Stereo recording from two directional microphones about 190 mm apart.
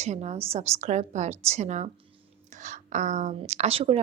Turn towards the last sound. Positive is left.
turn(degrees=-30)  # may be behind; listen again after turning